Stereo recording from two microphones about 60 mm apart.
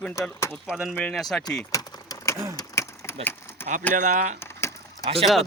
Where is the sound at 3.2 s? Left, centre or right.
Left.